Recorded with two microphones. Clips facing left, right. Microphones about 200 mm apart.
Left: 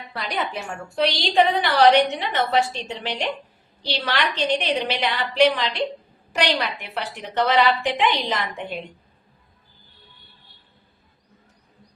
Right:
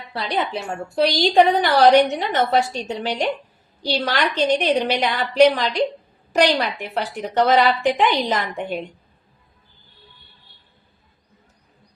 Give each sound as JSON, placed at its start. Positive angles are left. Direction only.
{"t": 0.1, "sound": "a woman's voice", "side_deg": -30}